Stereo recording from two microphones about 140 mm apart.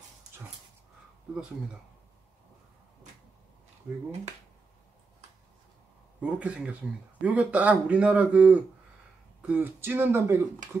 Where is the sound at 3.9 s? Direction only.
15° right (ahead or behind).